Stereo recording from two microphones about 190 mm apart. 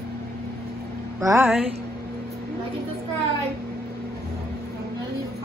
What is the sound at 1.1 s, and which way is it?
Speech, 15° right (ahead or behind).